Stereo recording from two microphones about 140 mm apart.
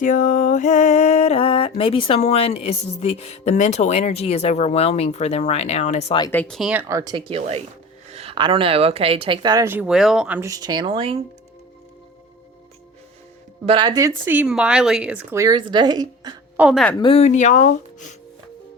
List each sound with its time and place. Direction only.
0.0 s music: 65° left (ahead or behind)
6.3 s speech: 10° left (ahead or behind)
6.6 s a woman's voice: 10° right (ahead or behind)
6.8 s speech: 25° right (ahead or behind); by 7.6 s 45° right (ahead or behind)
8.1 s a sound: 45° right (ahead or behind)
8.4 s speech: 35° right (ahead or behind)
9.6 s a woman's voice: 15° right (ahead or behind)
9.9 s speech: 5° right (ahead or behind)
10.4 s speech: 25° right (ahead or behind)
13.7 s speech: 30° right (ahead or behind)
14.3 s a woman's voice: 10° right (ahead or behind); by 16.3 s 30° right (ahead or behind)
16.6 s a woman's voice: 5° right (ahead or behind)
17.0 s speech: 40° left (ahead or behind)
17.2 s speech: 55° left (ahead or behind)